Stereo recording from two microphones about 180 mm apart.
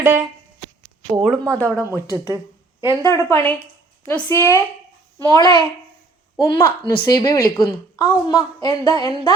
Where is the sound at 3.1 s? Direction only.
15° left (ahead or behind).